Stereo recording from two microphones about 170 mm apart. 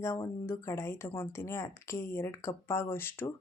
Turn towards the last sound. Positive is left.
turn(degrees=15)  # may be behind; listen again after turning